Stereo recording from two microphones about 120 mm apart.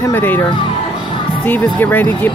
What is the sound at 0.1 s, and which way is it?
Speech, 20° left (ahead or behind).